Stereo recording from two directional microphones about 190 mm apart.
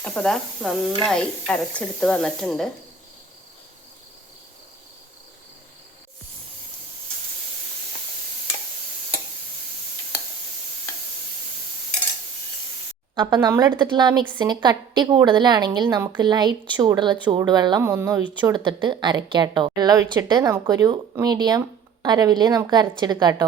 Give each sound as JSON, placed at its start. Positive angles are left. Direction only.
{"t": 0.0, "sound": "speech", "side_deg": 5}
{"t": 13.1, "sound": "a woman's voice", "side_deg": -20}